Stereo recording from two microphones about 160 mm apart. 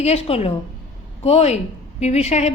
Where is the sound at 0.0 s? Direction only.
40° left (ahead or behind).